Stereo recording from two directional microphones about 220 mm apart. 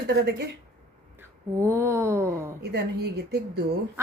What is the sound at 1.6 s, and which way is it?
Speech, 10° right (ahead or behind).